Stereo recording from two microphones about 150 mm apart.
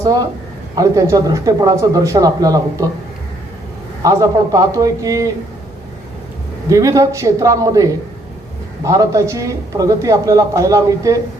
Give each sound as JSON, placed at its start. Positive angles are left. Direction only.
{"t": 0.0, "sound": "a man's voice", "side_deg": -25}
{"t": 4.0, "sound": "a man's voice", "side_deg": -20}
{"t": 6.7, "sound": "a man's voice", "side_deg": -20}